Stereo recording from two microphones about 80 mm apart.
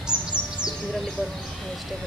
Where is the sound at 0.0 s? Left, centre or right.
Centre.